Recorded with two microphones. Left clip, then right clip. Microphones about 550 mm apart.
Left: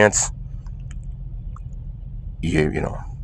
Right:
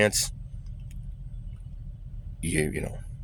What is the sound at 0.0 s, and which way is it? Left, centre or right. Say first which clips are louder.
Speech: left 8 dB; right.